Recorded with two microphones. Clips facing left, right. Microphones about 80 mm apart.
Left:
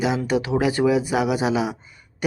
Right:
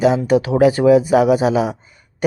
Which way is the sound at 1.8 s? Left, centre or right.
Right.